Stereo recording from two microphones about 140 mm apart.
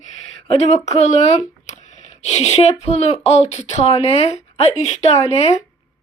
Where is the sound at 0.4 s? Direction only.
50° left (ahead or behind).